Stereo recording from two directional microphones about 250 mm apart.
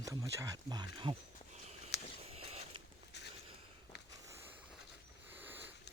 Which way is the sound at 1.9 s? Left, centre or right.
Left.